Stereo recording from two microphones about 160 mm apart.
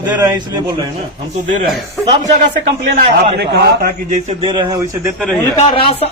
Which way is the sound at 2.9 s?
90° right.